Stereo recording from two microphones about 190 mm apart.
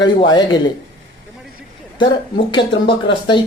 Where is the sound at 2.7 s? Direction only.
70° left (ahead or behind).